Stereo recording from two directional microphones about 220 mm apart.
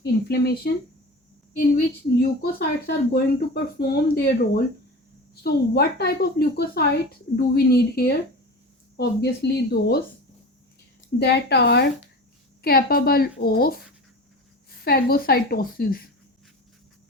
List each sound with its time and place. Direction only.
0.0 s speech: 45° left (ahead or behind)
2.4 s a woman's voice: 45° left (ahead or behind)
11.2 s a woman's voice: 50° left (ahead or behind)
14.8 s a woman's voice: 45° left (ahead or behind)